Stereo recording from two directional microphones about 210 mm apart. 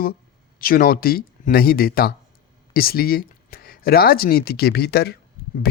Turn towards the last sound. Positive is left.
turn(degrees=50)  # may be behind; listen again after turning